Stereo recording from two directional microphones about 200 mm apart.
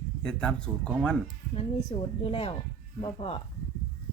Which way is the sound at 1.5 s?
30° left (ahead or behind).